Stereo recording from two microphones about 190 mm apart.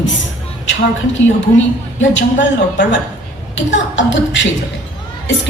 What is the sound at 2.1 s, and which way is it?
Speech, 70° left (ahead or behind).